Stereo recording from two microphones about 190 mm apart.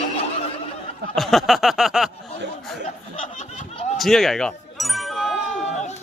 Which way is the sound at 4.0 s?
Centre (ahead or behind).